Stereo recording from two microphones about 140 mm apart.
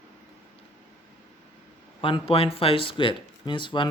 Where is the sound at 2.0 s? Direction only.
40° left (ahead or behind).